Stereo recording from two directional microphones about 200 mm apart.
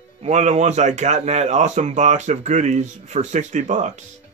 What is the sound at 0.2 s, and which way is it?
Speech, 35° right (ahead or behind).